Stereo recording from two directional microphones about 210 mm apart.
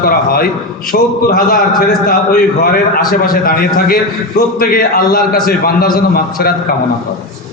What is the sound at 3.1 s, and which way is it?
A man's voice, 45° left (ahead or behind).